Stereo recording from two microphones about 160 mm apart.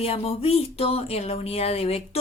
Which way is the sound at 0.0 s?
40° left (ahead or behind).